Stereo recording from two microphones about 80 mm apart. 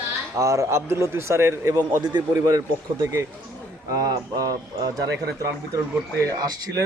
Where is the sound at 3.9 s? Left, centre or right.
Right.